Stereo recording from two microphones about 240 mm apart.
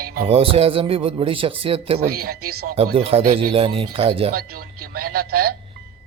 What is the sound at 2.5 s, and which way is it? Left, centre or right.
Speech, right.